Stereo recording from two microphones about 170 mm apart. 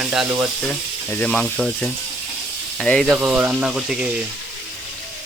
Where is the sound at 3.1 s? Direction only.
10° right (ahead or behind).